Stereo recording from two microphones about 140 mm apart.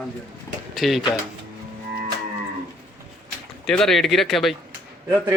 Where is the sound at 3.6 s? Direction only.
5° left (ahead or behind).